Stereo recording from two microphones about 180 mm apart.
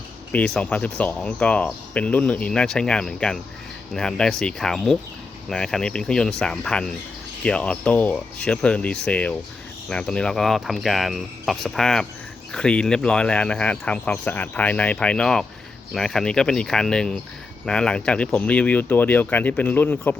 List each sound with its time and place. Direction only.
0.3 s speech: 5° left (ahead or behind)